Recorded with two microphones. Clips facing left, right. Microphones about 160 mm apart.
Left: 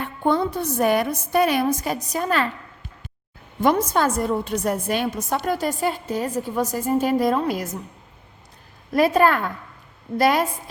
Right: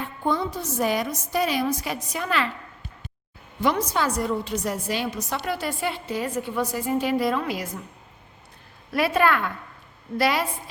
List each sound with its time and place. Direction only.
0.0 s a woman's voice: 60° left (ahead or behind); by 2.5 s 40° left (ahead or behind)
3.8 s a woman's voice: 50° left (ahead or behind)
8.9 s a woman's voice: 40° left (ahead or behind)